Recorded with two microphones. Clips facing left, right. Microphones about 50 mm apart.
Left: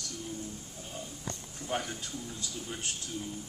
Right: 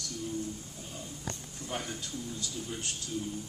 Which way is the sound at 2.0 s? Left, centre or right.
Left.